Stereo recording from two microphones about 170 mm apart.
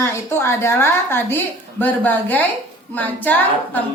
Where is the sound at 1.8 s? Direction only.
10° left (ahead or behind).